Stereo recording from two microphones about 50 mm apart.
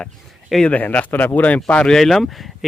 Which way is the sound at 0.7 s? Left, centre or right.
Left.